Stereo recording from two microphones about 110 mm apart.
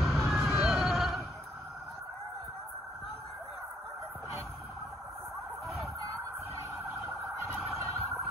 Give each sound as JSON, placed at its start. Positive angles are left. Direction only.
{"t": 0.0, "sound": "vehicle", "side_deg": 0}
{"t": 6.8, "sound": "police car", "side_deg": -20}
{"t": 7.5, "sound": "emergency vehicle", "side_deg": -5}